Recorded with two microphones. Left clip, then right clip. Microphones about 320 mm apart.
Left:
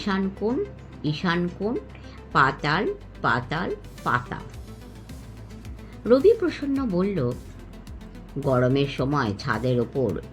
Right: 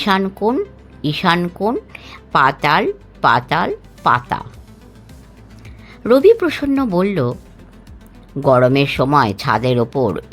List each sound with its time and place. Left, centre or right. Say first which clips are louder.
0.0 s speech: right 11 dB; right
6.0 s speech: right 7 dB; right
8.4 s speech: right 10 dB; right